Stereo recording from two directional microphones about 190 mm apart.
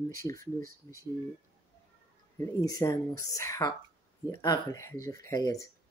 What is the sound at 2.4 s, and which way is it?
Speech, 15° left (ahead or behind).